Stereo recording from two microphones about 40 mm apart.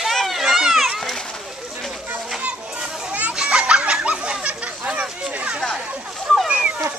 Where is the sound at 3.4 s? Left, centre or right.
Right.